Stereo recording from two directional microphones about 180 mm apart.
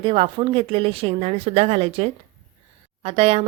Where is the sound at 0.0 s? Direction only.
30° right (ahead or behind).